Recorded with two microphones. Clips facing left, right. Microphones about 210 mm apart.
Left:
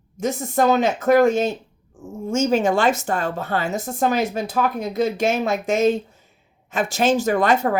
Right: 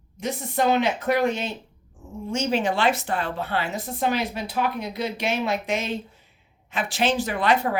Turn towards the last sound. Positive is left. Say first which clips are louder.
# left 4 dB
turn(degrees=45)  # may be behind; listen again after turning